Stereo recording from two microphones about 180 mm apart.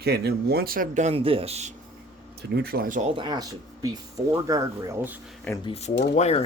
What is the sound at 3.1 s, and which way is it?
Speech, 25° right (ahead or behind).